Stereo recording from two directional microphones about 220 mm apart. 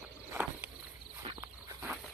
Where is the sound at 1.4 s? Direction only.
10° right (ahead or behind).